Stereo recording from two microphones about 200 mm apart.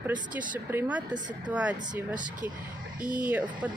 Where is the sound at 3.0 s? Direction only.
40° right (ahead or behind).